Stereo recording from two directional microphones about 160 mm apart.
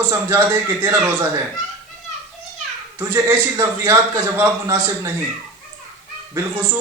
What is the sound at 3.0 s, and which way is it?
A man's voice, 20° right (ahead or behind).